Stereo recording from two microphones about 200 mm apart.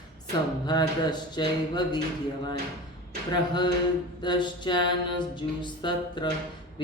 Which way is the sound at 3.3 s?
20° left (ahead or behind).